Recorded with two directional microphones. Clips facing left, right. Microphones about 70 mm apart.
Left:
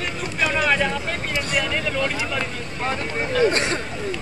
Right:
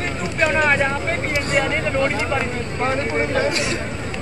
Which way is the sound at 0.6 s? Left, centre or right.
Right.